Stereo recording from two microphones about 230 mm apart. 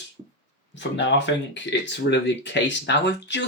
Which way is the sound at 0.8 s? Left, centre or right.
Left.